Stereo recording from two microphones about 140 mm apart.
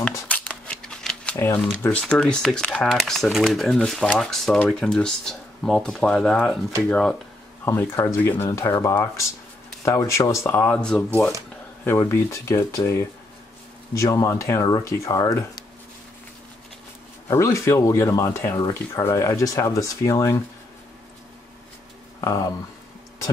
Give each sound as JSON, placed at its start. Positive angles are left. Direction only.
{"t": 0.3, "sound": "speech", "side_deg": 10}
{"t": 7.6, "sound": "speech", "side_deg": 15}
{"t": 11.8, "sound": "speech", "side_deg": 15}
{"t": 17.3, "sound": "speech", "side_deg": 20}
{"t": 22.2, "sound": "speech", "side_deg": 20}